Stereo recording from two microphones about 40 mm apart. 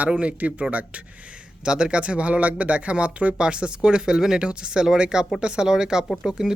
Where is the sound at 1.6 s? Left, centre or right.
Right.